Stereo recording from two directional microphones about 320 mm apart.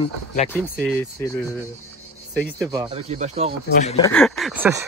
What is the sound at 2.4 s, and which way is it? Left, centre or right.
Speech, centre.